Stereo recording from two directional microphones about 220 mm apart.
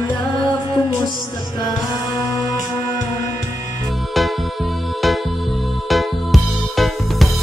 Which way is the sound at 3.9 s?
Centre (ahead or behind).